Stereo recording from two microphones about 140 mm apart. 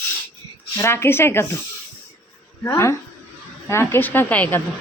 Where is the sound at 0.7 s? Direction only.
20° left (ahead or behind).